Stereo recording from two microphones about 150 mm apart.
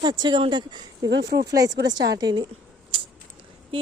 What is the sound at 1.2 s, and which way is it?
Speech, 90° right.